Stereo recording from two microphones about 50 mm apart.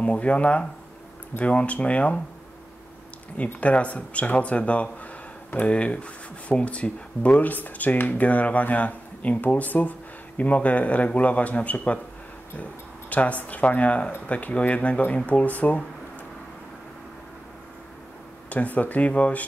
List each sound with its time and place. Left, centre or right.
0.0 s speech: left
3.6 s speech: left
13.1 s speech: left
18.5 s speech: left